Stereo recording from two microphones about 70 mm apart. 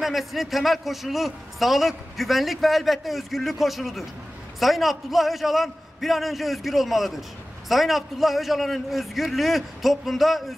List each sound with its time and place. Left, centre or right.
0.0 s a man's voice: centre